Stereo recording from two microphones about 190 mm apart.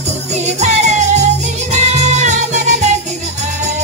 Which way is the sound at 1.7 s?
40° right (ahead or behind).